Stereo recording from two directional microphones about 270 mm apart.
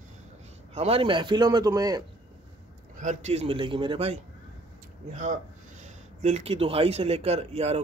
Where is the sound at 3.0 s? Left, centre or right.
Right.